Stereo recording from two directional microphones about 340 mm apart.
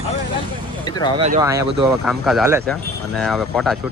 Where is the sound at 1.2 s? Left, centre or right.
Centre.